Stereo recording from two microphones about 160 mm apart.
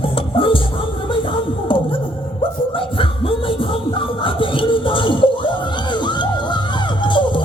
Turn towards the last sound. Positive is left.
turn(degrees=30)  # may be behind; listen again after turning